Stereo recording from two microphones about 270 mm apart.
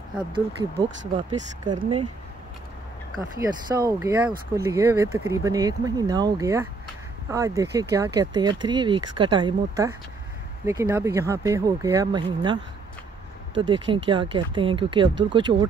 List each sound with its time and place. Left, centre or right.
1.1 s speech: centre
3.2 s speech: centre
13.6 s speech: centre